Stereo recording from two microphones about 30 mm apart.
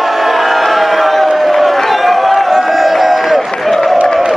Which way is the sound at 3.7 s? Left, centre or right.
Centre.